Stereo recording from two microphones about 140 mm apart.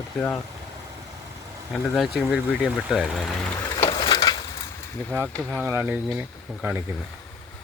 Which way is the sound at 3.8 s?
40° left (ahead or behind).